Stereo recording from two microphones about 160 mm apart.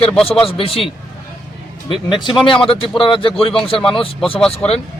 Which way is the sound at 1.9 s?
30° left (ahead or behind).